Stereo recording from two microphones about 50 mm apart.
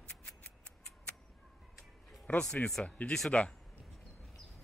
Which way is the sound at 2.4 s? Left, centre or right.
Centre.